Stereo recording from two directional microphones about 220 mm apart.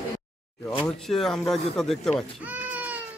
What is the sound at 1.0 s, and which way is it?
Speech, centre (ahead or behind).